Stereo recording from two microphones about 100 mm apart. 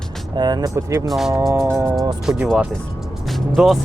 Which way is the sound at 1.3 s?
35° right (ahead or behind).